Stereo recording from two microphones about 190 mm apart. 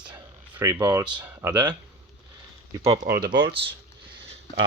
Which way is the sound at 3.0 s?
55° right (ahead or behind).